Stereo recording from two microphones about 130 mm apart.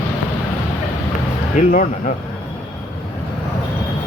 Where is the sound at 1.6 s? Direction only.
70° left (ahead or behind).